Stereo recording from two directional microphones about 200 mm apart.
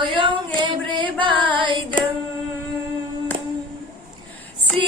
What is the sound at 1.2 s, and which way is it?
Female singing, 25° right (ahead or behind).